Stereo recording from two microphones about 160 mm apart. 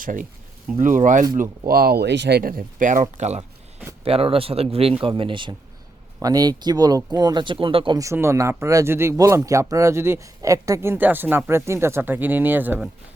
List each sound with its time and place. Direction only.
0.0 s speech: 55° right (ahead or behind)
1.4 s speech: 70° right (ahead or behind); by 7.9 s 35° right (ahead or behind)
7.9 s speech: 15° right (ahead or behind)